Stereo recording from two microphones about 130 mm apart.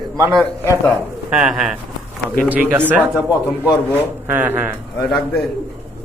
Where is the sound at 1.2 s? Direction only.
5° right (ahead or behind).